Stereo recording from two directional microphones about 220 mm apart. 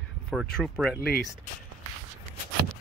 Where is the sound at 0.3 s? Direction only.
Centre (ahead or behind).